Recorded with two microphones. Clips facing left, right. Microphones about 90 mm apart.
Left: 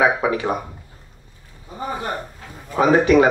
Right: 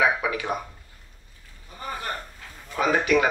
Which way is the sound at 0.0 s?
35° left (ahead or behind).